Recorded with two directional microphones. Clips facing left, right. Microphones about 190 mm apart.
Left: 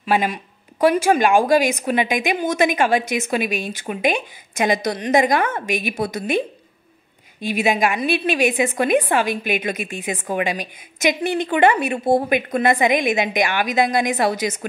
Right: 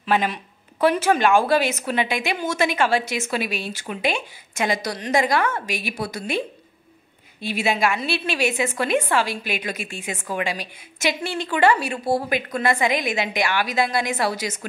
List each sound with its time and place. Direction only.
0.0 s a woman's voice: 10° left (ahead or behind)
7.4 s a woman's voice: 15° left (ahead or behind)